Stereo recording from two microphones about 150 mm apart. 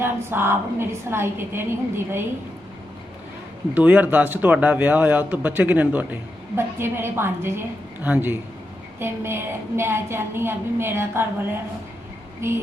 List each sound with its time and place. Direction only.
0.0 s speech: 15° right (ahead or behind)
3.8 s speech: 10° right (ahead or behind)
12.4 s speech: 15° right (ahead or behind)